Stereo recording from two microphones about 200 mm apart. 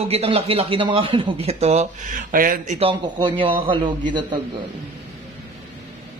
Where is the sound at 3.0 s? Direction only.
25° right (ahead or behind).